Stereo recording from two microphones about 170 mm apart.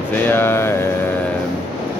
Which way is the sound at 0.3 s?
15° left (ahead or behind).